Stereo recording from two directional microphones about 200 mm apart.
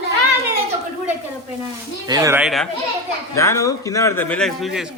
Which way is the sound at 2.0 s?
15° right (ahead or behind).